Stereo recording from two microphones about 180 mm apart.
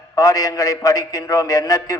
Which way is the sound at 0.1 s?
20° left (ahead or behind).